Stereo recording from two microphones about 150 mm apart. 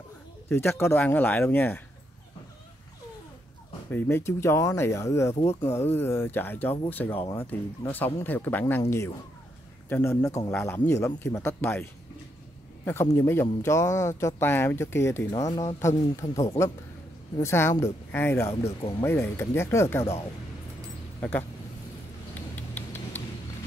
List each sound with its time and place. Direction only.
0.5 s speech: 15° left (ahead or behind)
3.9 s speech: 15° left (ahead or behind)
5.3 s speech: 45° left (ahead or behind)
5.6 s speech: 15° left (ahead or behind)
9.8 s speech: 15° left (ahead or behind)
18.5 s speech: 40° left (ahead or behind)
19.0 s speech: 15° left (ahead or behind)
21.2 s speech: 15° left (ahead or behind)